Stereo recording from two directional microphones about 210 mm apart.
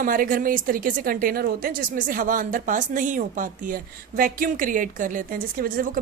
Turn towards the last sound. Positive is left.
turn(degrees=-40)  # may be behind; listen again after turning